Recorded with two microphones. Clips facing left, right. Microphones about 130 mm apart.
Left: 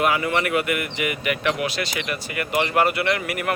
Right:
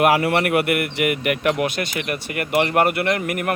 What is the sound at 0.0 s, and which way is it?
Speech, 65° right (ahead or behind).